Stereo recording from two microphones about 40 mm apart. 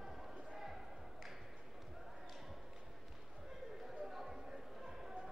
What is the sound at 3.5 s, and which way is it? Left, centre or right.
Chatter, centre.